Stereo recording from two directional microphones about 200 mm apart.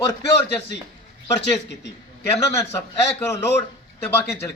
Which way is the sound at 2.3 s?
10° left (ahead or behind).